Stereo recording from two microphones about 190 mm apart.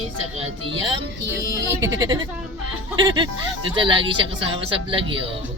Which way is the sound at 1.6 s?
15° right (ahead or behind).